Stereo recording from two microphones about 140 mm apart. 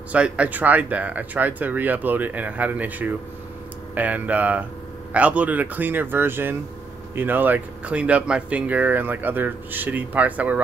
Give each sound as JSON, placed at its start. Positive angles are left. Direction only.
{"t": 0.1, "sound": "speech", "side_deg": -10}